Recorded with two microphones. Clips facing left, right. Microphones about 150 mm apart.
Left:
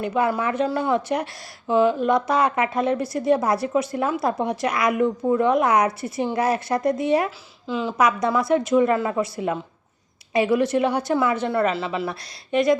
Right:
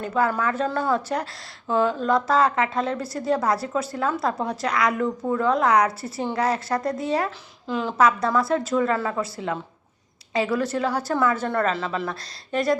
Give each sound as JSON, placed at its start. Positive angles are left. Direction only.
{"t": 0.0, "sound": "speech", "side_deg": 15}
{"t": 7.3, "sound": "speech", "side_deg": 5}
{"t": 7.9, "sound": "a woman's voice", "side_deg": 15}